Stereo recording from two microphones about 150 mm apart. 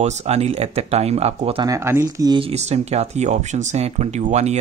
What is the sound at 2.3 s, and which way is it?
Speech, 40° right (ahead or behind).